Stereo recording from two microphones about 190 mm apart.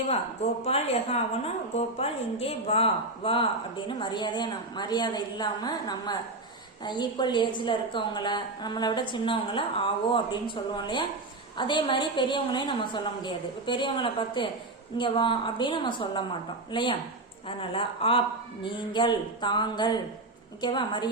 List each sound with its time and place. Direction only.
0.6 s a woman's voice: 35° left (ahead or behind)